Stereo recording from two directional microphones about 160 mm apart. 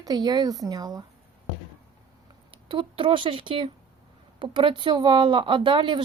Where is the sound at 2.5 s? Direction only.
35° right (ahead or behind).